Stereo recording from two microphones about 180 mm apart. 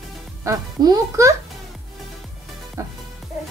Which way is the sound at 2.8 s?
20° right (ahead or behind).